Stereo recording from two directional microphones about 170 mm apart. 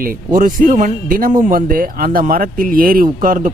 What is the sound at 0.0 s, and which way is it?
Speech, 55° right (ahead or behind).